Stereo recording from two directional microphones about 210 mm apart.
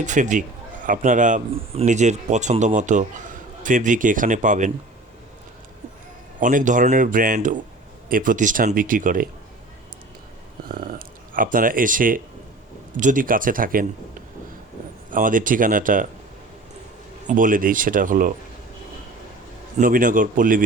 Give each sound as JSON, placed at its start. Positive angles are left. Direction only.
{"t": 0.0, "sound": "a man's voice", "side_deg": -35}
{"t": 6.4, "sound": "a man's voice", "side_deg": -40}
{"t": 10.7, "sound": "a man's voice", "side_deg": -40}
{"t": 15.1, "sound": "a man's voice", "side_deg": -40}
{"t": 17.2, "sound": "a man's voice", "side_deg": -40}
{"t": 19.7, "sound": "a man's voice", "side_deg": -40}